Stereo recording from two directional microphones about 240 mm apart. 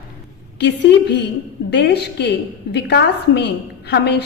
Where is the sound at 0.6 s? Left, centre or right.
Left.